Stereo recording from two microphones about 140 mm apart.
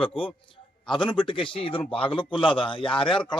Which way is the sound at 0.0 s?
40° left (ahead or behind).